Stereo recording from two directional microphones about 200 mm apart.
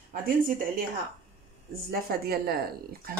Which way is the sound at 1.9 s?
50° right (ahead or behind).